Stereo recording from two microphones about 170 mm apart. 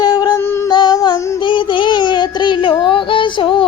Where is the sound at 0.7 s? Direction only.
25° left (ahead or behind).